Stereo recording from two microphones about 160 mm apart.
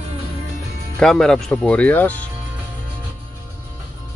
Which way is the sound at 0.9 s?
5° left (ahead or behind).